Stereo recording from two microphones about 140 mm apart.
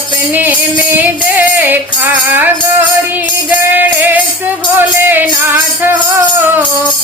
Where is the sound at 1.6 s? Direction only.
15° right (ahead or behind).